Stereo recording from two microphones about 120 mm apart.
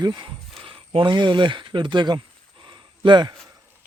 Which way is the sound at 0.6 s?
50° right (ahead or behind).